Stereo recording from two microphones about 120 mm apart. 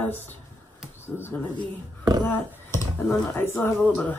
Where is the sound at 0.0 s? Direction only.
15° left (ahead or behind).